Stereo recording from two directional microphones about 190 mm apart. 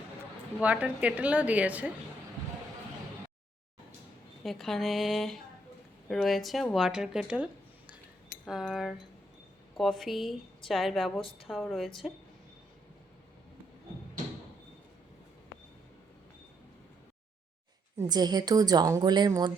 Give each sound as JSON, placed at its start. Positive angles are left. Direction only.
{"t": 0.6, "sound": "speech", "side_deg": -5}
{"t": 4.4, "sound": "a woman's voice", "side_deg": 0}
{"t": 17.9, "sound": "a woman's voice", "side_deg": -20}